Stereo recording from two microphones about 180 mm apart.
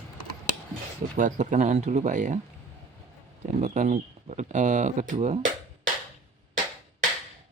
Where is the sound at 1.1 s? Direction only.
45° right (ahead or behind).